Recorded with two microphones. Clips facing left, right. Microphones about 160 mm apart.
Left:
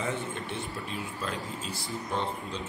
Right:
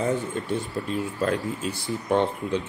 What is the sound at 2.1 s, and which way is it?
Speech, 60° right (ahead or behind).